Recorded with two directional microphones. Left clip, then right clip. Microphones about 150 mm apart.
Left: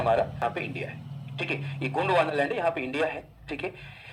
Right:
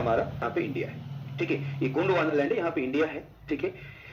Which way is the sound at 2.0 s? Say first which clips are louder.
Left 2 dB; 40° left (ahead or behind).